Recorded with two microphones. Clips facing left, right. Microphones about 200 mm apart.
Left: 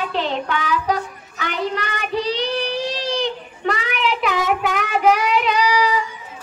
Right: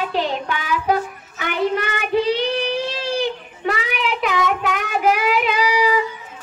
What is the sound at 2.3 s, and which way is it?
Child singing, 55° right (ahead or behind).